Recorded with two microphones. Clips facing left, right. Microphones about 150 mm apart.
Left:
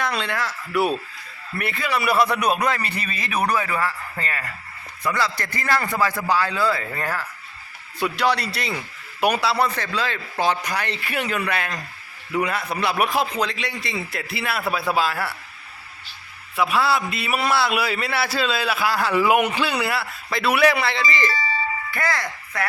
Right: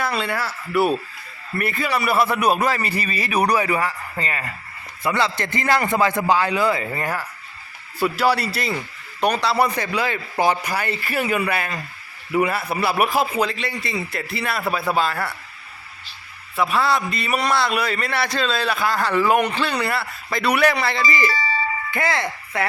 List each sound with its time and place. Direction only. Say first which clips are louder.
0.0 s a man's voice: right 1 dB; 5° right (ahead or behind)
9.6 s a man's voice: right 2 dB; 10° right (ahead or behind); by 15.4 s 5° left (ahead or behind)
16.6 s a man's voice: right 1 dB; centre (ahead or behind)
21.9 s speech: right 4 dB; 25° right (ahead or behind)